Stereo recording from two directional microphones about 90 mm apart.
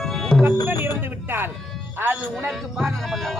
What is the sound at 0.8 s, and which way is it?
A man's voice, 25° right (ahead or behind).